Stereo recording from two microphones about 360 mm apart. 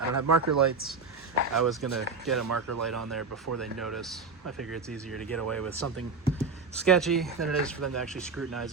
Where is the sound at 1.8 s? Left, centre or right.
Right.